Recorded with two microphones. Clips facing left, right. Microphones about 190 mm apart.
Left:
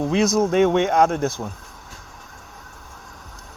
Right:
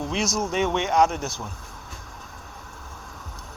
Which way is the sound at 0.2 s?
55° left (ahead or behind).